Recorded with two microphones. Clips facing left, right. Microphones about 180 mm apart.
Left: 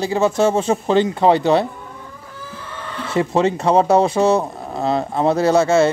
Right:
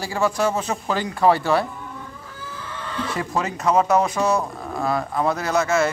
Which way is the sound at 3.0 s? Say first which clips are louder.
Left 9 dB; 25° left (ahead or behind).